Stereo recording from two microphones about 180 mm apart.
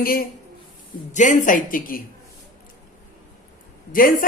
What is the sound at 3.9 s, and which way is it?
Speech, 50° left (ahead or behind).